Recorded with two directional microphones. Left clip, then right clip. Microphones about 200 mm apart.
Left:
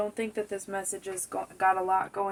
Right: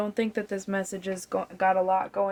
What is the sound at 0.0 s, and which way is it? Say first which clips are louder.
Speech: right 2 dB; 55° right (ahead or behind).